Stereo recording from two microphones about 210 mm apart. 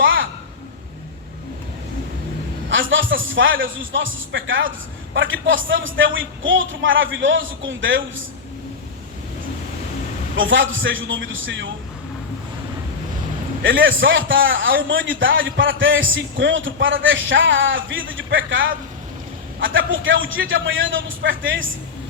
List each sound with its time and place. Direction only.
0.0 s a sound: 65° right (ahead or behind)
2.6 s a man's voice: 65° right (ahead or behind)
10.3 s a man's voice: 65° right (ahead or behind)
13.6 s a man's voice: 65° right (ahead or behind)